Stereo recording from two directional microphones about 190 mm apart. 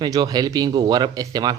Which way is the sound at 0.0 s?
20° right (ahead or behind).